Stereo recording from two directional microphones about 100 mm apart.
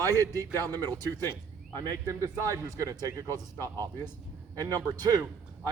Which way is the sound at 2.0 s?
30° right (ahead or behind).